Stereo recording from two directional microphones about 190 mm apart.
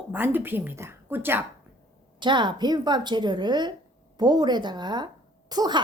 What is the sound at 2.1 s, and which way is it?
Speech, 25° right (ahead or behind).